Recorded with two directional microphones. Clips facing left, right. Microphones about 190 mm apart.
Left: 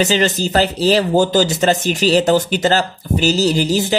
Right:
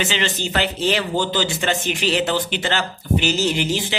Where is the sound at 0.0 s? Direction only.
40° left (ahead or behind).